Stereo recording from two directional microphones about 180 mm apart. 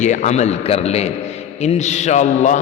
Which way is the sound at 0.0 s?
40° left (ahead or behind).